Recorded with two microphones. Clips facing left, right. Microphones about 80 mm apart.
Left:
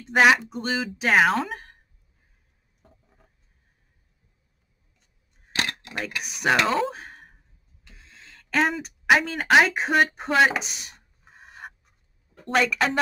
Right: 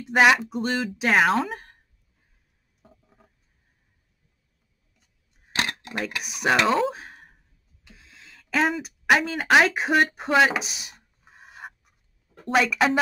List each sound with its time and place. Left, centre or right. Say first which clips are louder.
0.0 s speech: even; centre
2.8 s a sound: right 3 dB; centre
5.5 s camera: right 1 dB; right
6.0 s speech: even; centre
7.8 s a sound: even; centre
12.4 s speech: right 2 dB; centre